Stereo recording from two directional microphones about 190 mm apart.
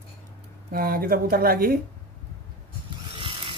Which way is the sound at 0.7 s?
50° right (ahead or behind).